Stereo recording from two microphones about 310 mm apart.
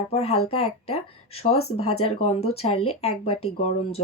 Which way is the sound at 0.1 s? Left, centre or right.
Centre.